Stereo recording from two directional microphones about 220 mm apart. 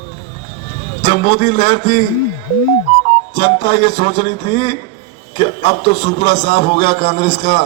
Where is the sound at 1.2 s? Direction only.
30° left (ahead or behind).